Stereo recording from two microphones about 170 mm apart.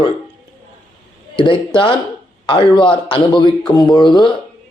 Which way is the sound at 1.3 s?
30° left (ahead or behind).